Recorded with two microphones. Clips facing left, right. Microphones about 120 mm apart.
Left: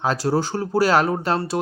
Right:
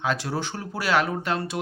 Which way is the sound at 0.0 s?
40° left (ahead or behind).